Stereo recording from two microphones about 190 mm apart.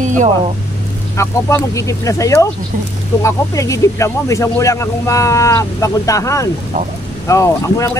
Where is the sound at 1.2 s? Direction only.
15° left (ahead or behind).